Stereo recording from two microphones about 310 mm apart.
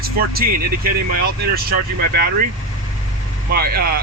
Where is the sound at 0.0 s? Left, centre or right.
Right.